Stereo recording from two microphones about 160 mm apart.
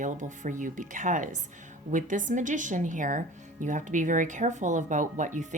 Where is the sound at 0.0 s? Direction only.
55° right (ahead or behind).